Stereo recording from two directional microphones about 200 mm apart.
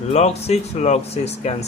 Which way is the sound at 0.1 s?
35° left (ahead or behind).